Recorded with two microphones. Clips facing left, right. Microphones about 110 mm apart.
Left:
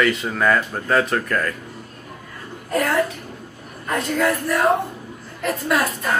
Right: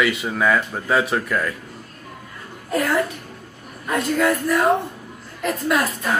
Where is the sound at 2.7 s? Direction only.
Centre (ahead or behind).